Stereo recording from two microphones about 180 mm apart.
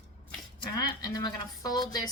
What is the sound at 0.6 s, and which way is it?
Speech, 20° left (ahead or behind).